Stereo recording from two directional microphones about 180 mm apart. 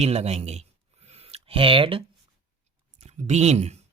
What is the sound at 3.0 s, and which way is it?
Speech, 35° right (ahead or behind).